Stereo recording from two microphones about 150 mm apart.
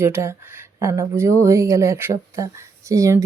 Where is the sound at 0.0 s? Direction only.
15° right (ahead or behind).